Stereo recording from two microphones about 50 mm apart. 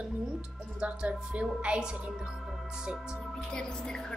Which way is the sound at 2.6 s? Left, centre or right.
Centre.